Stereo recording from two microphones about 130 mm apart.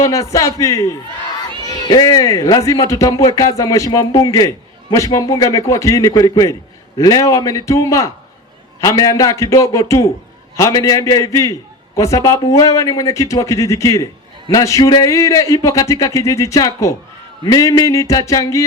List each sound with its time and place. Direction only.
0.0 s speech: 25° left (ahead or behind)